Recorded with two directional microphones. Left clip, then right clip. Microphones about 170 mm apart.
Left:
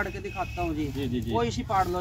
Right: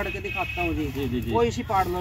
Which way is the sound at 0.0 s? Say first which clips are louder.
Right 3 dB; 20° left (ahead or behind).